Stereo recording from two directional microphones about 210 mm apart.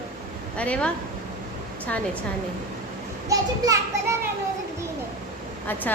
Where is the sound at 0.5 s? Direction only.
5° left (ahead or behind).